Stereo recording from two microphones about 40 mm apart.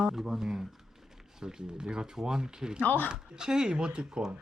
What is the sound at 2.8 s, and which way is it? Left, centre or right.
Speech, left.